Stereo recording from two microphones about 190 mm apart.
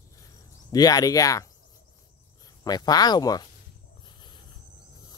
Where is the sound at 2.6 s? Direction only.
20° left (ahead or behind).